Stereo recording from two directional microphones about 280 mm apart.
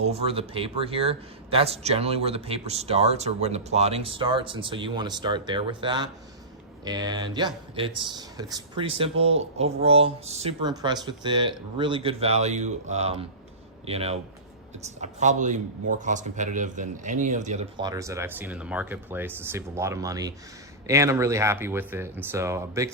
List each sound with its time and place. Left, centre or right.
0.0 s speech: right